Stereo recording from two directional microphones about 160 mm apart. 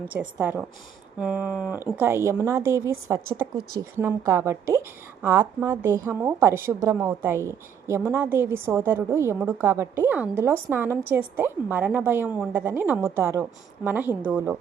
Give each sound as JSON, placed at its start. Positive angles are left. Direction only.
{"t": 0.1, "sound": "a woman's voice", "side_deg": -10}